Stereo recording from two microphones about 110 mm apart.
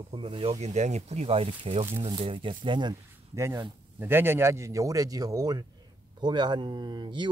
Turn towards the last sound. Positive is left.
turn(degrees=-45)  # may be behind; listen again after turning